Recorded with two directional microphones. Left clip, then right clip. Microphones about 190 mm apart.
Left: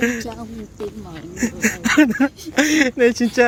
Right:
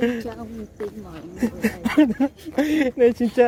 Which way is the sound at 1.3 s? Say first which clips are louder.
Left 4 dB; 15° right (ahead or behind).